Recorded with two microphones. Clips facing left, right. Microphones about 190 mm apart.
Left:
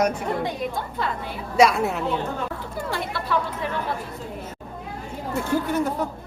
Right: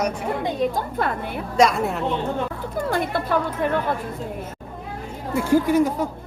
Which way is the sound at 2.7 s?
50° right (ahead or behind).